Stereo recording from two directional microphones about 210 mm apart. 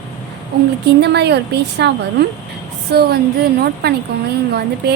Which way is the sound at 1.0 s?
55° right (ahead or behind).